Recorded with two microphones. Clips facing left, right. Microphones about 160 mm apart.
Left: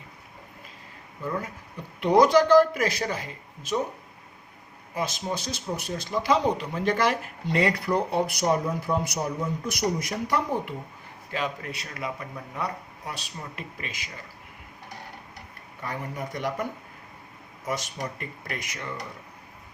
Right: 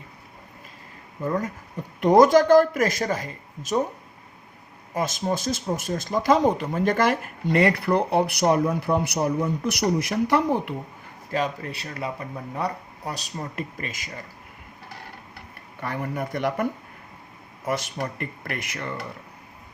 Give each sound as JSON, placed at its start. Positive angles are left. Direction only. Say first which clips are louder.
{"t": 1.2, "sound": "speech", "louder": "right 5 dB", "side_deg": -40}
{"t": 4.9, "sound": "speech", "louder": "right 4 dB", "side_deg": -45}
{"t": 11.3, "sound": "speech", "louder": "right 4 dB", "side_deg": -35}
{"t": 15.8, "sound": "speech", "louder": "right 4 dB", "side_deg": -60}
{"t": 17.7, "sound": "speech", "louder": "right 4 dB", "side_deg": -60}